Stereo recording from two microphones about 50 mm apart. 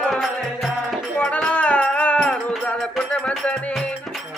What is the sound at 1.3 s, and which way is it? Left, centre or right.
Music, left.